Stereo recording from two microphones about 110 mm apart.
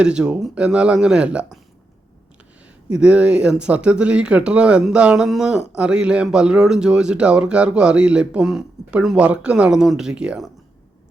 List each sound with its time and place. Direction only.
0.0 s speech: 10° right (ahead or behind)
2.9 s speech: 10° right (ahead or behind)